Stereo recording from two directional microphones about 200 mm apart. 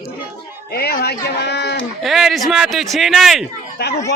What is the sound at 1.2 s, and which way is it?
Speech, 55° left (ahead or behind).